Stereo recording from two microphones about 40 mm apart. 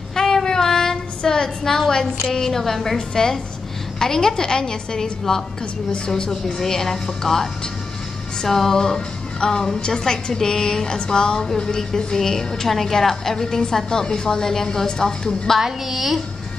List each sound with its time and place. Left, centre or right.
0.1 s child singing: centre
2.2 s a woman's voice: centre
4.0 s a woman's voice: centre
8.4 s music: centre
9.8 s a woman's voice: centre
15.6 s a woman's voice: centre